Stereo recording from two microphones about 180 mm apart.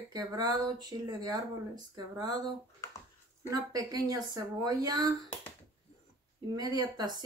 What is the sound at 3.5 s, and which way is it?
Speech, 20° right (ahead or behind).